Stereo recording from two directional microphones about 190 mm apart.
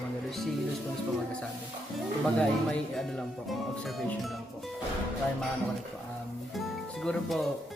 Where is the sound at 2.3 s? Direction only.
5° left (ahead or behind).